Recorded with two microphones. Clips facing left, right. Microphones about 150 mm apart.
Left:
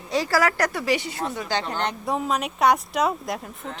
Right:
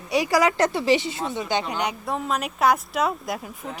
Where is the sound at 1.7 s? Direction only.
5° right (ahead or behind).